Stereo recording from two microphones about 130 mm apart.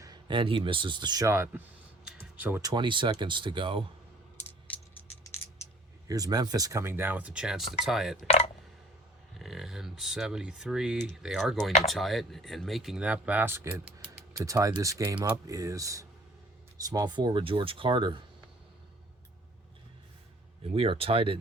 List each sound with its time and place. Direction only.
0.0 s speech: 35° right (ahead or behind); by 1.6 s 20° right (ahead or behind)
2.0 s a sound: 10° right (ahead or behind)
2.6 s speech: 30° right (ahead or behind)
6.1 s speech: 30° right (ahead or behind); by 8.3 s centre (ahead or behind)
9.4 s speech: centre (ahead or behind); by 18.2 s 35° right (ahead or behind)
20.7 s speech: 45° right (ahead or behind)